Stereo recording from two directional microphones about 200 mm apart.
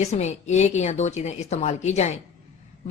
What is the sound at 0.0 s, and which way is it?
Speech, 35° left (ahead or behind).